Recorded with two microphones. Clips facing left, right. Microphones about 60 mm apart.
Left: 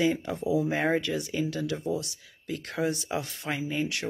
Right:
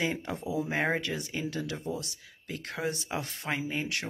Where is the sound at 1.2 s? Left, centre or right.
Right.